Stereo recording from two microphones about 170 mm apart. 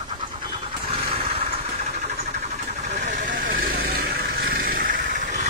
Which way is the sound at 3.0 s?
55° right (ahead or behind).